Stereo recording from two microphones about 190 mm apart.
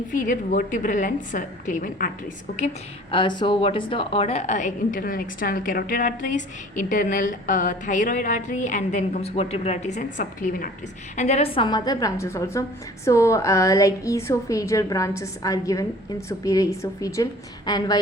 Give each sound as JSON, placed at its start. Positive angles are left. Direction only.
{"t": 0.1, "sound": "a woman's voice", "side_deg": 45}
{"t": 3.1, "sound": "a woman's voice", "side_deg": 25}
{"t": 11.2, "sound": "a woman's voice", "side_deg": 35}